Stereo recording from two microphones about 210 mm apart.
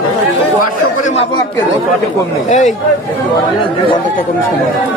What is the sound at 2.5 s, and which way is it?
Speech, 35° left (ahead or behind).